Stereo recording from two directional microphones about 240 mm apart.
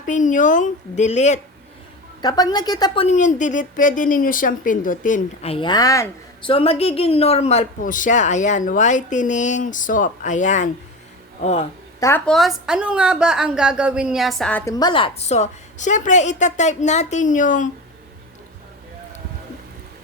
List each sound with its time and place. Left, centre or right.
0.0 s a woman's voice: left
2.2 s a woman's voice: centre
11.9 s a woman's voice: centre; by 17.7 s left